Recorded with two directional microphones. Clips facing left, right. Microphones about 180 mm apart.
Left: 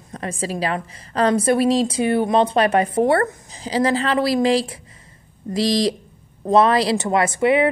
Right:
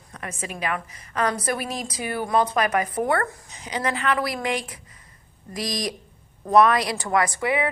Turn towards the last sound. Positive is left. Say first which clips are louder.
# left 6 dB
turn(degrees=25)  # may be behind; listen again after turning